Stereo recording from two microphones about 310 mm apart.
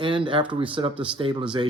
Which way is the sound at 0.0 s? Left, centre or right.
Centre.